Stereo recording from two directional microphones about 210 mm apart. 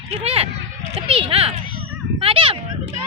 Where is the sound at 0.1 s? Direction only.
30° right (ahead or behind).